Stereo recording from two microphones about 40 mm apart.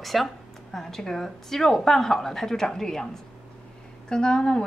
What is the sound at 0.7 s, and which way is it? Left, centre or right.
A woman's voice, centre.